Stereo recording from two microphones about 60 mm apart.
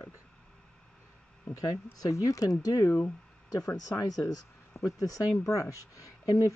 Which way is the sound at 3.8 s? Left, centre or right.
Left.